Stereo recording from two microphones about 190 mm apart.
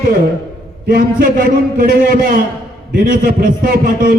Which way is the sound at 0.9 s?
50° right (ahead or behind).